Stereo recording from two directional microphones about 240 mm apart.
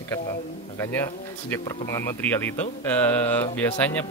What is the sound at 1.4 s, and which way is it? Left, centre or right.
Speech, centre.